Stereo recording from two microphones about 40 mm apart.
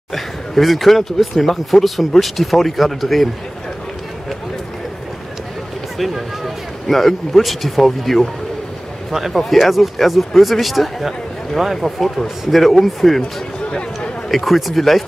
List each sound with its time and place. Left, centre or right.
0.1 s speech: centre
5.9 s speech: centre
9.1 s speech: centre
13.7 s a sound: left
14.3 s speech: centre